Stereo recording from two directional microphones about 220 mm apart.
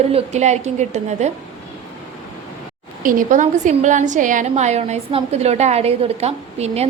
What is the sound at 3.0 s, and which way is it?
A woman's voice, 35° right (ahead or behind).